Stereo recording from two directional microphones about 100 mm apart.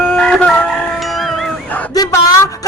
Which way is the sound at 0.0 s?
10° left (ahead or behind).